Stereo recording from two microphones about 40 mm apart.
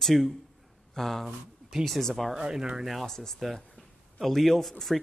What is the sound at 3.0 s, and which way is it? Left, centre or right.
Speech, centre.